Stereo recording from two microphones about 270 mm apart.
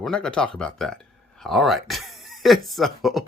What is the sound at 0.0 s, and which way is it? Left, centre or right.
Speech, centre.